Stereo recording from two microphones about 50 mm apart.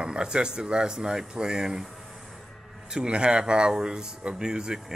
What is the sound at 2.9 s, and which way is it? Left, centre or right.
Speech, centre.